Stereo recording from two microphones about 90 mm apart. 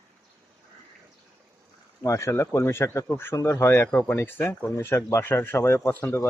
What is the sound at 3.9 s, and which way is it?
Speech, 15° left (ahead or behind).